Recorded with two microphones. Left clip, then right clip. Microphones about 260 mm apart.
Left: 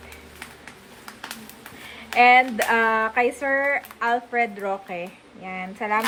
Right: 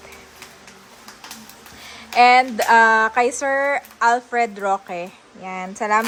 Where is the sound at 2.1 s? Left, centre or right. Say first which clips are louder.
Right 2 dB; centre.